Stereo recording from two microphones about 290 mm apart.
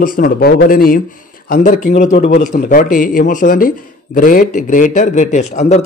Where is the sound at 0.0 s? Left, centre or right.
Left.